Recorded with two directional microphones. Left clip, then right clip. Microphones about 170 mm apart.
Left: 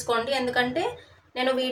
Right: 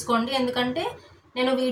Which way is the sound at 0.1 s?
45° left (ahead or behind).